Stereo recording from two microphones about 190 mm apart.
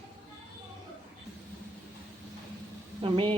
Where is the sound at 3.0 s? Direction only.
25° right (ahead or behind).